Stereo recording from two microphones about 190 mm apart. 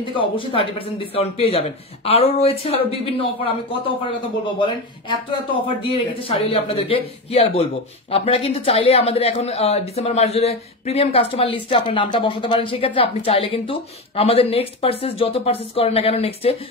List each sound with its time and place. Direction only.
0.1 s speech: 25° left (ahead or behind)